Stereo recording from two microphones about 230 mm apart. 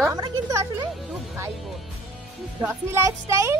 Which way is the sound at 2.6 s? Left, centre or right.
Centre.